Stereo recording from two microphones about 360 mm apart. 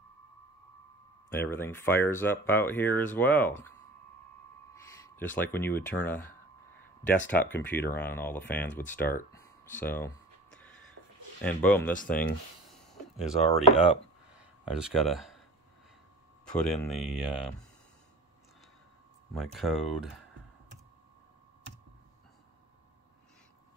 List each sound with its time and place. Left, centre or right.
1.3 s speech: centre
4.8 s speech: centre
7.2 s speech: centre
11.4 s speech: centre
12.6 s a sound: centre
13.4 s speech: centre
14.3 s a sound: centre
16.5 s speech: centre
19.3 s speech: centre